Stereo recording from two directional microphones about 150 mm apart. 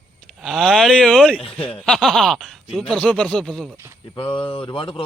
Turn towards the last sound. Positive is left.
turn(degrees=35)  # may be behind; listen again after turning